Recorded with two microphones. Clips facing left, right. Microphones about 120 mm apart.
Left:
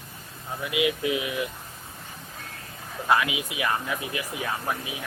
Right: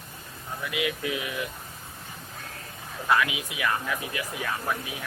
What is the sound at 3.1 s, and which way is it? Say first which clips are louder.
Speech: left 1 dB; 20° left (ahead or behind).